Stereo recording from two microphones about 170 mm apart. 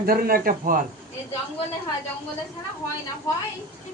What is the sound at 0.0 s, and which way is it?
Speech, 60° right (ahead or behind).